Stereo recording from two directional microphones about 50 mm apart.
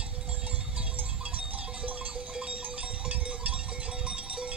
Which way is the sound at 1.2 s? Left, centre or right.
Right.